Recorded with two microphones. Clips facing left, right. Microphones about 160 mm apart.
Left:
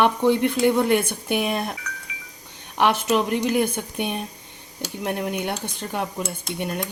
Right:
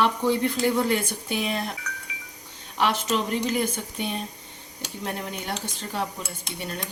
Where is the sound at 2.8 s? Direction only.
60° left (ahead or behind).